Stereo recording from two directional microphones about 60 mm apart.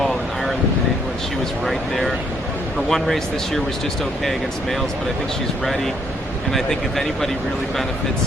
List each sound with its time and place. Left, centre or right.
1.6 s speech: centre
6.5 s speech: centre